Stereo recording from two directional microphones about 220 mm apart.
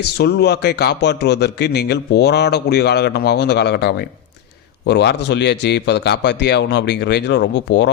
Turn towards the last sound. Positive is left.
turn(degrees=50)  # may be behind; listen again after turning